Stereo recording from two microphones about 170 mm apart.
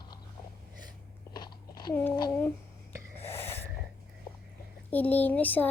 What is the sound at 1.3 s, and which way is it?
Biting, 25° left (ahead or behind).